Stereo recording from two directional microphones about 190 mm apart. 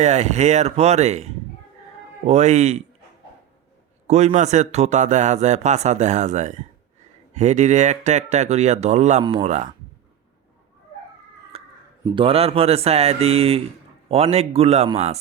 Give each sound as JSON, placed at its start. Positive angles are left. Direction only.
{"t": 0.0, "sound": "a man's voice", "side_deg": -35}
{"t": 4.0, "sound": "a man's voice", "side_deg": -35}
{"t": 11.5, "sound": "crow", "side_deg": -30}
{"t": 12.0, "sound": "a man's voice", "side_deg": -25}